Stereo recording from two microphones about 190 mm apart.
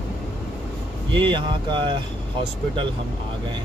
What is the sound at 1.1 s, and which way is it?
Speech, 25° right (ahead or behind).